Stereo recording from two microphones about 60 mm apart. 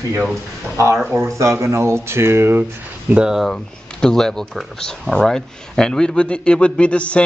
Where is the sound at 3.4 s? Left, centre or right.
Centre.